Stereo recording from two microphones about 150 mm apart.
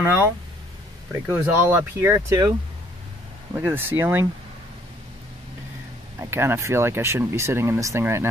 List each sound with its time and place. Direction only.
0.0 s speech: 15° right (ahead or behind)
1.3 s speech: 15° right (ahead or behind)
3.5 s speech: 15° right (ahead or behind)
6.1 s speech: 15° right (ahead or behind)